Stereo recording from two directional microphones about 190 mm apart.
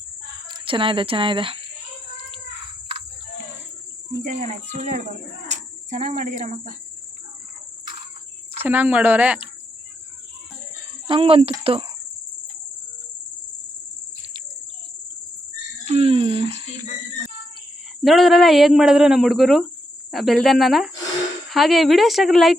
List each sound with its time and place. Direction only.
0.4 s speech: 25° right (ahead or behind)
4.4 s speech: 35° right (ahead or behind)
8.5 s speech: 10° right (ahead or behind)
11.0 s speech: 30° right (ahead or behind)
15.8 s speech: 35° right (ahead or behind)
18.0 s speech: centre (ahead or behind)